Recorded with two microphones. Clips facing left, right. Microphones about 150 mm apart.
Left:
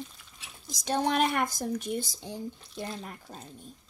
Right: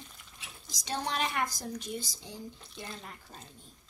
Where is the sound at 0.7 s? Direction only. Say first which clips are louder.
Left 7 dB; 55° left (ahead or behind).